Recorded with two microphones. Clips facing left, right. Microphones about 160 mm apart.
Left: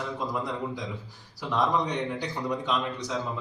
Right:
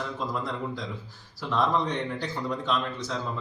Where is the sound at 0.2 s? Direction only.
15° left (ahead or behind).